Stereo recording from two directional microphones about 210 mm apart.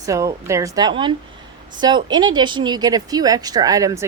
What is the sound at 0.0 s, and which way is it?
A woman's voice, 15° right (ahead or behind).